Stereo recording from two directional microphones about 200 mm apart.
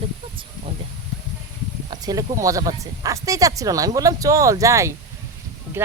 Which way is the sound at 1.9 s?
20° right (ahead or behind).